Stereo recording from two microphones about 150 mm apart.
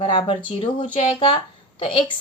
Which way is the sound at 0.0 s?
40° left (ahead or behind).